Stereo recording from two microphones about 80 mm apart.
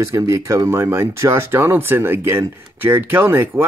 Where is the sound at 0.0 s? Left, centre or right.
Right.